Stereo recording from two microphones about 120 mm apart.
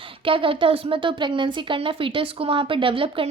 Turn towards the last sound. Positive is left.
turn(degrees=-50)  # may be behind; listen again after turning